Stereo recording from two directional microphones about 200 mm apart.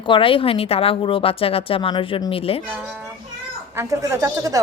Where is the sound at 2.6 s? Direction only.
5° right (ahead or behind).